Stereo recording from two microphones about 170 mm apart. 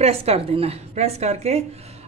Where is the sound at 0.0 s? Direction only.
35° right (ahead or behind).